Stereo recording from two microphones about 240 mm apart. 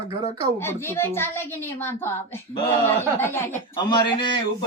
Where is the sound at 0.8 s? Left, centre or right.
Centre.